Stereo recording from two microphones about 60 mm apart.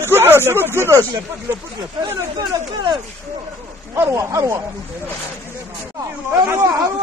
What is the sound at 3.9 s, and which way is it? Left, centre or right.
Speech, right.